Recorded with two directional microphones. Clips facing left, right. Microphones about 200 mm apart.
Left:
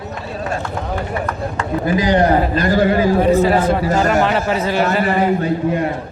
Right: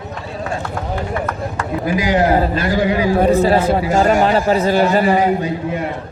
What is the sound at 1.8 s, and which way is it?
A man's voice, 10° right (ahead or behind).